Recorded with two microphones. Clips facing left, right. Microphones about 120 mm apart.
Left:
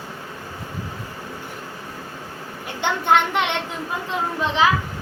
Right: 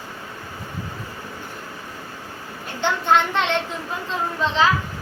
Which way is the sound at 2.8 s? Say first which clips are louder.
Even; 15° left (ahead or behind).